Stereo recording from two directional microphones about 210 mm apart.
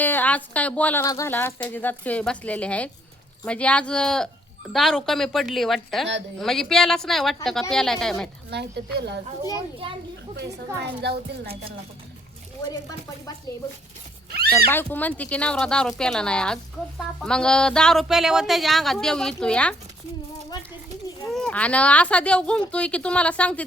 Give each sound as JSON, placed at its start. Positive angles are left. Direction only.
{"t": 0.0, "sound": "speech", "side_deg": 10}
{"t": 8.4, "sound": "speech", "side_deg": -50}
{"t": 10.8, "sound": "speech", "side_deg": -50}
{"t": 14.3, "sound": "neigh", "side_deg": -50}
{"t": 14.5, "sound": "speech", "side_deg": 10}
{"t": 21.2, "sound": "speech", "side_deg": 5}